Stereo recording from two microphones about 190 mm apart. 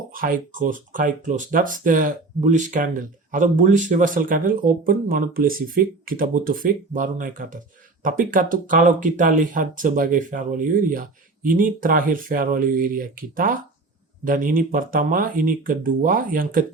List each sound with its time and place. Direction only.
0.1 s speech: 45° right (ahead or behind)